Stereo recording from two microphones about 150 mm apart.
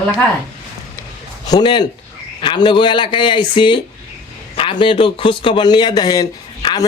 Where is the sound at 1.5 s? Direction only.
30° left (ahead or behind).